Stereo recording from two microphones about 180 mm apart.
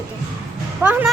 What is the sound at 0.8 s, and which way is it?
Speech, 10° right (ahead or behind).